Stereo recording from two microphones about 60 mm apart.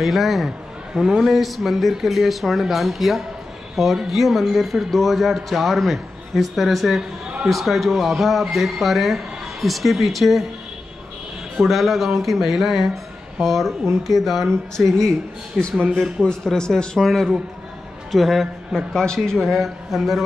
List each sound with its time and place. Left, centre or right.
0.0 s speech: centre
11.5 s a man's voice: centre